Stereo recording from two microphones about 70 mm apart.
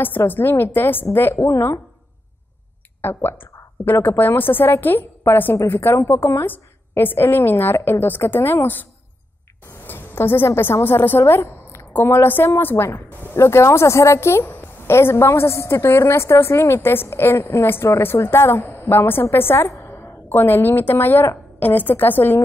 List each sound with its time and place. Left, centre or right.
0.3 s a woman's voice: left
3.0 s a sound: left
4.0 s a woman's voice: left
9.8 s a woman's voice: left